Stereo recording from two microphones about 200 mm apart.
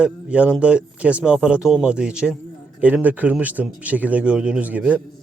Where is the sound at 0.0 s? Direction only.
5° right (ahead or behind).